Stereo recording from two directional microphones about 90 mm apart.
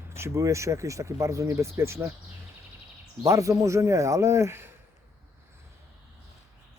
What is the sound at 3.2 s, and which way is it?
Speech, 35° right (ahead or behind).